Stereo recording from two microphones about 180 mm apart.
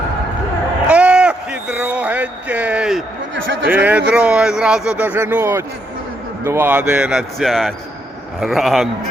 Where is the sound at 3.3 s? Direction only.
90° right.